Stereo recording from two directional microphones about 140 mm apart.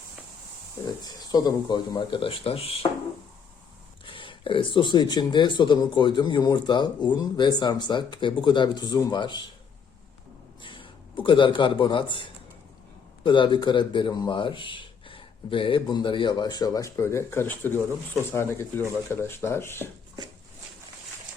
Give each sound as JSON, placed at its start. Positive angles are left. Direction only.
{"t": 1.0, "sound": "speech", "side_deg": 30}
{"t": 4.0, "sound": "speech", "side_deg": 35}
{"t": 10.6, "sound": "a man's voice", "side_deg": 35}